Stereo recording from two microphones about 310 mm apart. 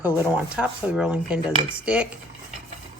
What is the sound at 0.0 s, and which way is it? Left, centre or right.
Speech, centre.